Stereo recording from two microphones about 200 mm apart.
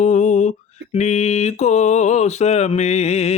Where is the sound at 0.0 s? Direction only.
40° left (ahead or behind).